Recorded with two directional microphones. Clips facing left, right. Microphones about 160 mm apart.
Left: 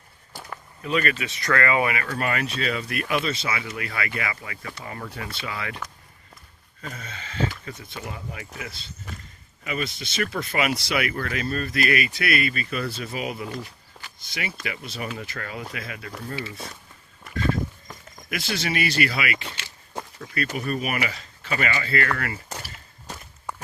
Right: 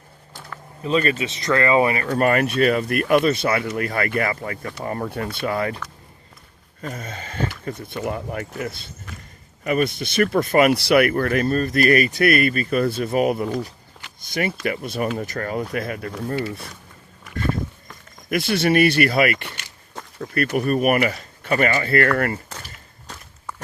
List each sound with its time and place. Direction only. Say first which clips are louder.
0.8 s speech: right 5 dB; 30° right (ahead or behind)
6.8 s speech: right 6 dB; 50° right (ahead or behind)
18.3 s speech: right 9 dB; 55° right (ahead or behind)
22.4 s a sound: left 1 dB; 10° left (ahead or behind)